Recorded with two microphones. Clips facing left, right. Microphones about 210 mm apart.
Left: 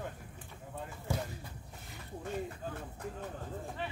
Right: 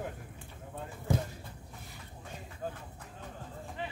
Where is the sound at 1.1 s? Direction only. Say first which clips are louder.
Right 5 dB; 15° right (ahead or behind).